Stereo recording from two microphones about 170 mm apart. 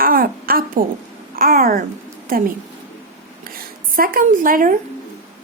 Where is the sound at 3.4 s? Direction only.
60° right (ahead or behind).